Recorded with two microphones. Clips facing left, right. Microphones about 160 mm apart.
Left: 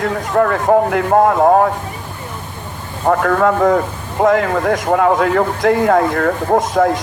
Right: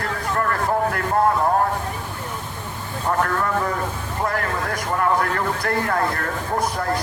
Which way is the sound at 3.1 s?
75° left (ahead or behind).